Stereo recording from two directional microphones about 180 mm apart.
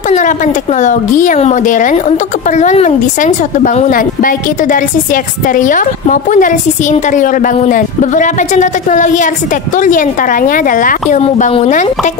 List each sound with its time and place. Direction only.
0.1 s a woman's voice: 45° left (ahead or behind)